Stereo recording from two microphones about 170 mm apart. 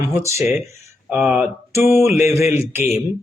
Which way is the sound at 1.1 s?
10° right (ahead or behind).